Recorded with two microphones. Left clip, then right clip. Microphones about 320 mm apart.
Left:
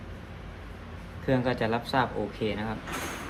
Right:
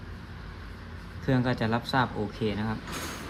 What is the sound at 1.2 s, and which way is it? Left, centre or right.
Speech, right.